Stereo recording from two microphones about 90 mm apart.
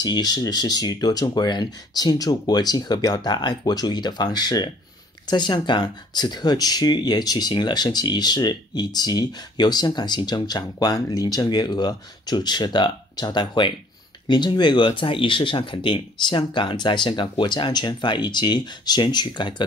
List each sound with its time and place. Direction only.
0.0 s speech: 50° left (ahead or behind)